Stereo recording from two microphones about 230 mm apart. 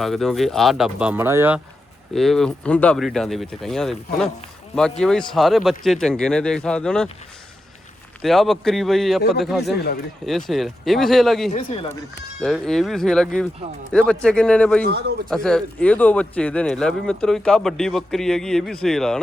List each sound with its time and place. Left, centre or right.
0.0 s speech: centre
2.1 s speech: centre
8.2 s speech: centre
9.7 s speech: left
10.2 s speech: centre
11.5 s speech: left
12.4 s speech: centre
14.8 s speech: right
15.3 s speech: centre